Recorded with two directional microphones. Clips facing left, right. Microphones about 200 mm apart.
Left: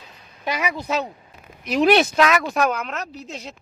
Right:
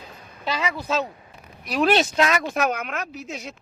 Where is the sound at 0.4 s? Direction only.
15° left (ahead or behind).